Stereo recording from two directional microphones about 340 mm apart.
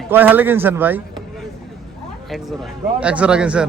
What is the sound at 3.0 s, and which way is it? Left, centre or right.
Speech, centre.